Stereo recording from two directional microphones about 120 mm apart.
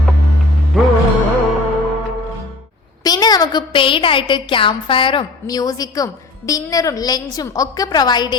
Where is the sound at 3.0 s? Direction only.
35° left (ahead or behind).